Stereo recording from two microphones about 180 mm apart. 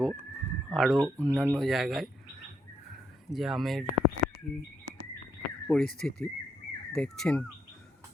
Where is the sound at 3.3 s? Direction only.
Centre (ahead or behind).